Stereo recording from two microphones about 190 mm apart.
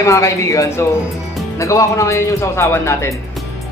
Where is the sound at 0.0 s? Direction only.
15° left (ahead or behind).